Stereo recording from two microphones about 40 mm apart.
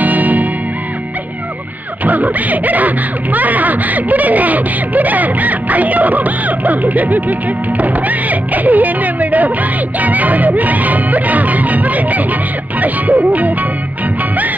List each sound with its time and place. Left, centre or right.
0.0 s music: right
2.0 s speech: right